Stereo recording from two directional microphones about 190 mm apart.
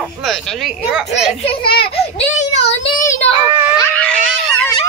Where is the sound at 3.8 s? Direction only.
5° left (ahead or behind).